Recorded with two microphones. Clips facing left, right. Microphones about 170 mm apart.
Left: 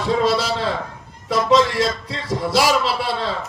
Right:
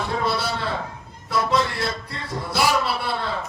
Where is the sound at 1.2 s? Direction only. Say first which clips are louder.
Left 6 dB; 80° left.